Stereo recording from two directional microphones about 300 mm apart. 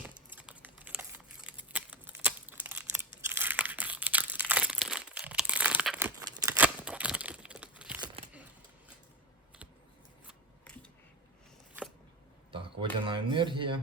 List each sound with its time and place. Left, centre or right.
0.3 s typing: centre
3.2 s crumpling: centre
10.2 s scissors: centre
12.5 s speech: centre